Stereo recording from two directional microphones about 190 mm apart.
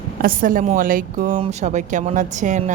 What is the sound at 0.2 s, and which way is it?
A woman's voice, 45° right (ahead or behind).